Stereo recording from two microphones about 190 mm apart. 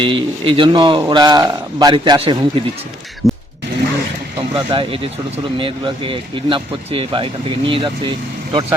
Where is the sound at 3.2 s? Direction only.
15° left (ahead or behind).